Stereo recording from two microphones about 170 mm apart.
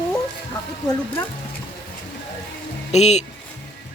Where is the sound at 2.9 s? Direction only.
40° left (ahead or behind).